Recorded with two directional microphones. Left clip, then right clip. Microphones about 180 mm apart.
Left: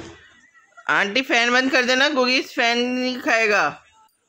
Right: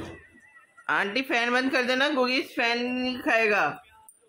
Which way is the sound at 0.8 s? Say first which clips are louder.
Left 6 dB; 50° left (ahead or behind).